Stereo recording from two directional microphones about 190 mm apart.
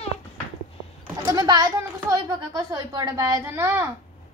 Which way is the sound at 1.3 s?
20° right (ahead or behind).